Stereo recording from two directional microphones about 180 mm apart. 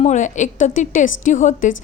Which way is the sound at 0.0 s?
40° left (ahead or behind).